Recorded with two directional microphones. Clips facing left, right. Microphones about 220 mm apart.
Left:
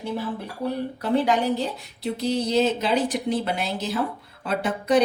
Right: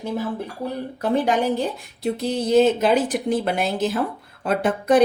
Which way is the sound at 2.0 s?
50° right (ahead or behind).